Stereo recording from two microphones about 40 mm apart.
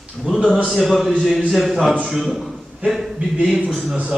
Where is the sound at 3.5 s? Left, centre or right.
Centre.